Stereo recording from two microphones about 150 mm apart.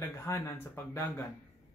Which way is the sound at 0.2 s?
20° left (ahead or behind).